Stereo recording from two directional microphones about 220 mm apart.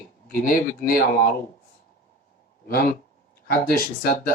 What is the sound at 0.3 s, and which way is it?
Speech, 40° left (ahead or behind).